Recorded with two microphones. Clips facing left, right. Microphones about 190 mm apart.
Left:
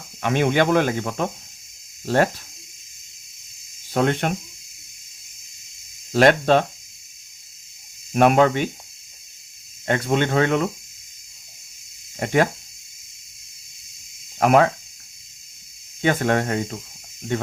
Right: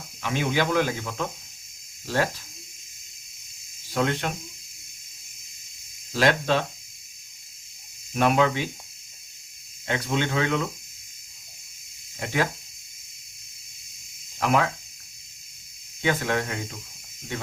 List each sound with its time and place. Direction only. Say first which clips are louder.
0.2 s speech: left 6 dB; 55° left (ahead or behind)
3.9 s speech: left 5 dB; 55° left (ahead or behind)
6.1 s speech: left 7 dB; 55° left (ahead or behind)
8.1 s speech: left 6 dB; 55° left (ahead or behind)
9.8 s speech: left 6 dB; 50° left (ahead or behind)
12.2 s speech: left 7 dB; 55° left (ahead or behind)
14.3 s speech: left 7 dB; 55° left (ahead or behind)
16.0 s speech: left 5 dB; 55° left (ahead or behind)